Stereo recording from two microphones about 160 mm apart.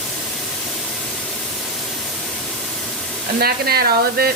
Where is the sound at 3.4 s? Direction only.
75° right (ahead or behind).